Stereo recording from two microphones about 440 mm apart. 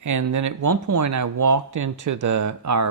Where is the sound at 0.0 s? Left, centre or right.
Right.